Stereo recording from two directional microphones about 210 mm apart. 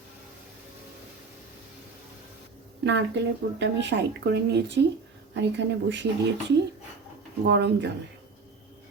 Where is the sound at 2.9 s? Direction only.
55° right (ahead or behind).